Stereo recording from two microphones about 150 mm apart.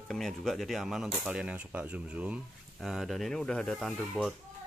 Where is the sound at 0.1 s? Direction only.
Centre (ahead or behind).